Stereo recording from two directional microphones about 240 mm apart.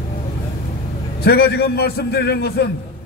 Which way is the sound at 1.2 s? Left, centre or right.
Left.